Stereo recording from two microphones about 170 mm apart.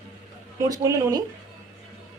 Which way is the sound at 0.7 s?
20° right (ahead or behind).